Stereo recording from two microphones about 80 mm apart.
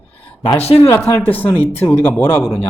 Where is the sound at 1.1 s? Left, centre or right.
Left.